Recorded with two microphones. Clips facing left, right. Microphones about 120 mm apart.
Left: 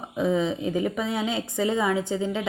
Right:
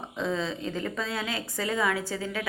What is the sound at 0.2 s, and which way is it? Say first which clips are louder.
A woman's voice: left 6 dB; 15° left (ahead or behind).